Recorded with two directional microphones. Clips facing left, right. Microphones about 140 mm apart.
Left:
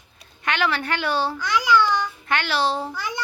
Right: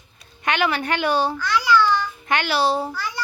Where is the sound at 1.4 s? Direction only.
15° left (ahead or behind).